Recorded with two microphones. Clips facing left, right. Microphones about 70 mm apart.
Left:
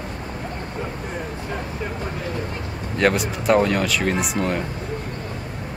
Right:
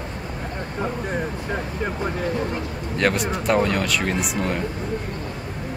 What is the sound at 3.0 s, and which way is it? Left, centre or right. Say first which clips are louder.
Speech: left 2 dB; centre.